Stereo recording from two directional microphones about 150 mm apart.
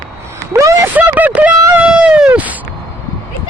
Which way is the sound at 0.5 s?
20° right (ahead or behind).